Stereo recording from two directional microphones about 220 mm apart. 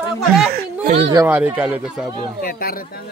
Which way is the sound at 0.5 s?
45° right (ahead or behind).